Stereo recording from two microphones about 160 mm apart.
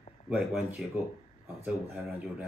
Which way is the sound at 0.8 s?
5° right (ahead or behind).